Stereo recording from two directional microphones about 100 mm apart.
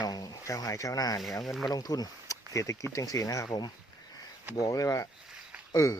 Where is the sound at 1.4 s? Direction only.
Centre (ahead or behind).